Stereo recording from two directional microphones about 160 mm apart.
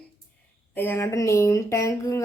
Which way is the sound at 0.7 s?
10° left (ahead or behind).